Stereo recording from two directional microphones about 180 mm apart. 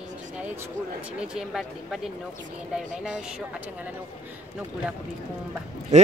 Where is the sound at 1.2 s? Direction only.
5° right (ahead or behind).